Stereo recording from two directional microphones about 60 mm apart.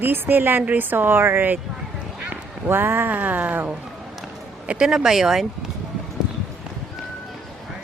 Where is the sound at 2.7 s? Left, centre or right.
Right.